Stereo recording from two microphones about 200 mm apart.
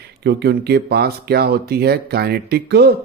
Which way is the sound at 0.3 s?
55° right (ahead or behind).